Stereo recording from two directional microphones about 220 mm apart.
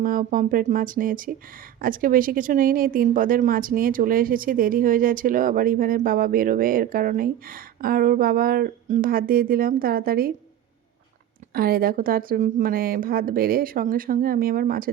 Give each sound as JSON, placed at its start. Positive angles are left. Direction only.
{"t": 0.0, "sound": "speech", "side_deg": -40}
{"t": 11.5, "sound": "speech", "side_deg": -40}